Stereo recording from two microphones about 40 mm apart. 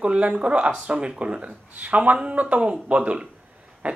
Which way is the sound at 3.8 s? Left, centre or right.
Right.